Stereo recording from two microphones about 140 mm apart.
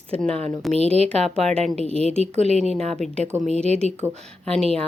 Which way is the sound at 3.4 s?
50° right (ahead or behind).